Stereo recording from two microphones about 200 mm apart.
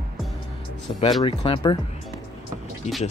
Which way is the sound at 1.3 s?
25° left (ahead or behind).